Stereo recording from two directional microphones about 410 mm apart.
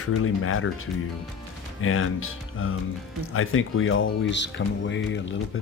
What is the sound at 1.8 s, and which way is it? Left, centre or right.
Speech, left.